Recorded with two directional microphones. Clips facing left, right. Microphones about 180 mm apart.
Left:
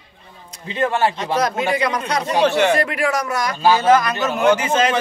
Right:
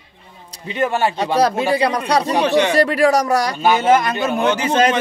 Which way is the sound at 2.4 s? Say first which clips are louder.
Left 2 dB; 15° right (ahead or behind).